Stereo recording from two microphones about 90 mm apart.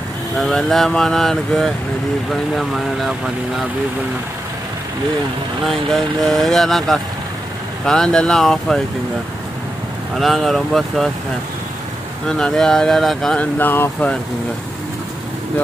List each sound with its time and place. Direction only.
0.4 s speech: 5° left (ahead or behind)
5.9 s speech: 5° left (ahead or behind)
10.1 s speech: centre (ahead or behind)
12.3 s speech: 5° left (ahead or behind)
13.6 s speech: 20° left (ahead or behind)